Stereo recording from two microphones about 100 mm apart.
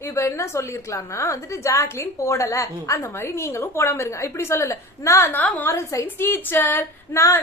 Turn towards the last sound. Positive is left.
turn(degrees=20)  # may be behind; listen again after turning